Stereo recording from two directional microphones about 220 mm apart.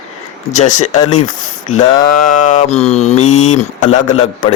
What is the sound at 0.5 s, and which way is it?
Speech, 30° left (ahead or behind).